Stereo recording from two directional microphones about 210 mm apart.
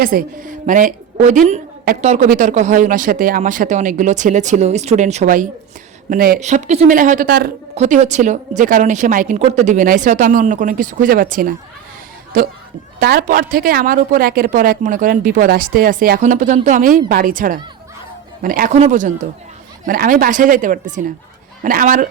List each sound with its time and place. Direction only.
0.0 s a woman's voice: 40° right (ahead or behind)
7.8 s a woman's voice: 35° right (ahead or behind)